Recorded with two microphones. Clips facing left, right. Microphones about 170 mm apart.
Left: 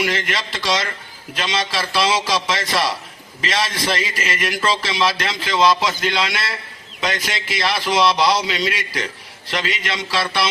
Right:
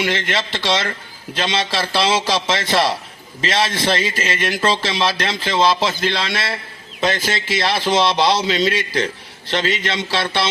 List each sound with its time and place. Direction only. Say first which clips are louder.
0.0 s a man's voice: right 1 dB; 30° right (ahead or behind)